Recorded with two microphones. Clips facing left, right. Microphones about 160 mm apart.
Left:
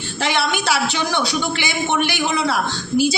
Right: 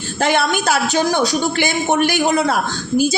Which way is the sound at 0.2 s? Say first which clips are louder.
Right 4 dB; 50° right (ahead or behind).